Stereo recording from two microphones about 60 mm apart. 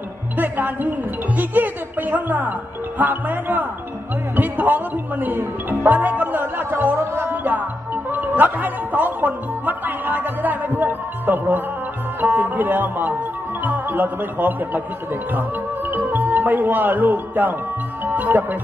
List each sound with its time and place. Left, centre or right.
0.4 s speech: right
7.0 s music: right
7.4 s speech: right
13.6 s music: right
15.3 s speech: right